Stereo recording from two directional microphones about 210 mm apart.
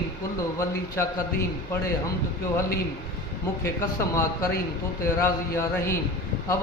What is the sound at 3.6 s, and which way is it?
A man's voice, 15° left (ahead or behind).